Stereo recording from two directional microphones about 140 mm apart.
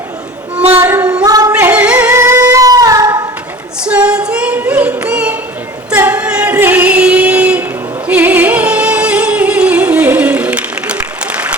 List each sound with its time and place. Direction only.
0.7 s child singing: 15° right (ahead or behind)
1.2 s singing: 25° right (ahead or behind)
1.5 s yodeling: 10° right (ahead or behind)
2.4 s a sound: 25° right (ahead or behind)
3.8 s singing: 5° right (ahead or behind)
8.0 s music: 10° right (ahead or behind)